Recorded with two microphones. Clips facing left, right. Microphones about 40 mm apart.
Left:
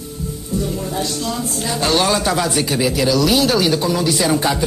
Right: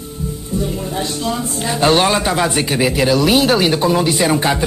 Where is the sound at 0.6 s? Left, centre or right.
Right.